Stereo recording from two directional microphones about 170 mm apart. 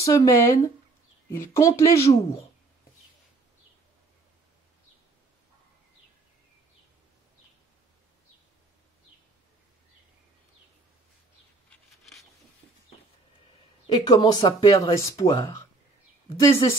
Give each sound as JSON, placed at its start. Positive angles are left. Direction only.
{"t": 0.0, "sound": "speech", "side_deg": 20}
{"t": 13.8, "sound": "speech", "side_deg": 25}
{"t": 16.3, "sound": "speech", "side_deg": 15}